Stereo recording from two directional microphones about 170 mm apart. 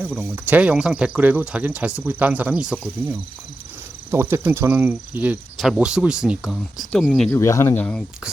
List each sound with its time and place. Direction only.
0.2 s speech: 10° right (ahead or behind)
4.1 s speech: 15° right (ahead or behind)
7.3 s speech: 20° left (ahead or behind)